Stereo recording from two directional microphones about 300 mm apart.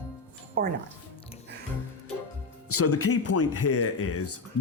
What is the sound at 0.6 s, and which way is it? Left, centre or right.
Speech, right.